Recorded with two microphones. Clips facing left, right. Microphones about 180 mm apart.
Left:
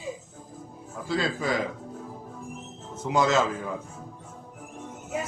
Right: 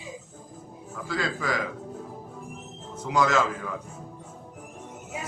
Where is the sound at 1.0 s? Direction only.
25° left (ahead or behind).